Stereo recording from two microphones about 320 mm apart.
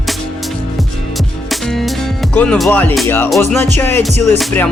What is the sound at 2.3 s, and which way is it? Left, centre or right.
Music, centre.